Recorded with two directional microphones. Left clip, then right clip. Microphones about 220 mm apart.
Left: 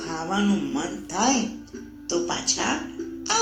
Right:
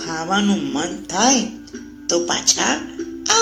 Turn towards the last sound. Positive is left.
turn(degrees=-35)  # may be behind; listen again after turning